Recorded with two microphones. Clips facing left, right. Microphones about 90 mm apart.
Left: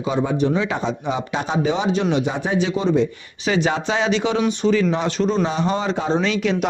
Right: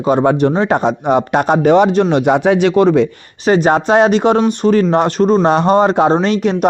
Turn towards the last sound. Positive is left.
turn(degrees=-50)  # may be behind; listen again after turning